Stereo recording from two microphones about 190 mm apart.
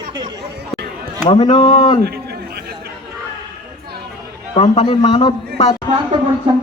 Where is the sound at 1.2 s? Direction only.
25° left (ahead or behind).